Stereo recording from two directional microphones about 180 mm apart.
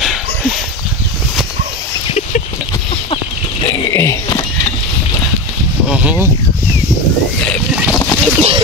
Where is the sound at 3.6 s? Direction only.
30° left (ahead or behind).